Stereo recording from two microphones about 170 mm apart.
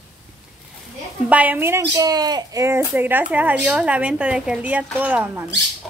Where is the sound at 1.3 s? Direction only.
10° right (ahead or behind).